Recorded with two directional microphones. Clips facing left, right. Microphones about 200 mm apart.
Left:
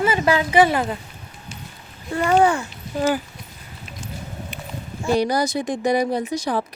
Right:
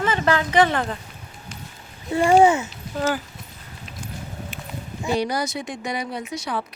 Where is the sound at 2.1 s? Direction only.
25° right (ahead or behind).